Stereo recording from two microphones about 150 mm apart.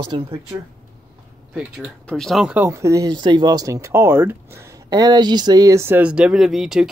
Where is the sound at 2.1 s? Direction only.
Centre (ahead or behind).